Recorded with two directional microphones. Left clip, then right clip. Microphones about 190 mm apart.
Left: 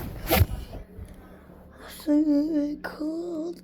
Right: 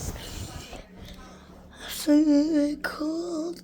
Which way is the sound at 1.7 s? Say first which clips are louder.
Right 2 dB; 15° right (ahead or behind).